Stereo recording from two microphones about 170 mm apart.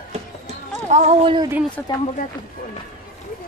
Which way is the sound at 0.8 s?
45° right (ahead or behind).